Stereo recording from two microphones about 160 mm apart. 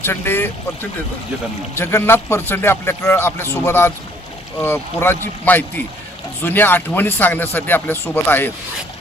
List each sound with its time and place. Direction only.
0.0 s a man's voice: 15° left (ahead or behind)